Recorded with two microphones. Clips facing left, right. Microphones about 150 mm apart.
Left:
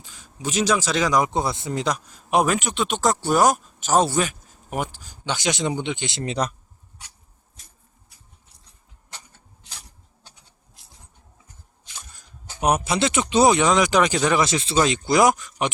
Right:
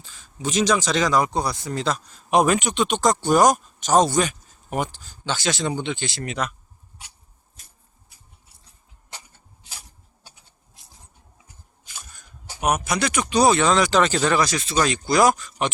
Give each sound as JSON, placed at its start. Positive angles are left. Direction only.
{"t": 0.0, "sound": "speech", "side_deg": 10}
{"t": 7.6, "sound": "a sound", "side_deg": 0}
{"t": 10.2, "sound": "insect", "side_deg": -5}
{"t": 12.5, "sound": "speech", "side_deg": 30}
{"t": 14.4, "sound": "speech", "side_deg": 25}